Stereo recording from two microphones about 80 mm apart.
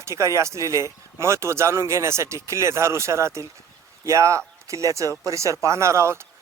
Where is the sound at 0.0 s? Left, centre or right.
Right.